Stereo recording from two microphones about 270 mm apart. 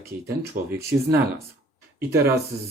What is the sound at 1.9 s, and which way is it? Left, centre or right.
Speech, centre.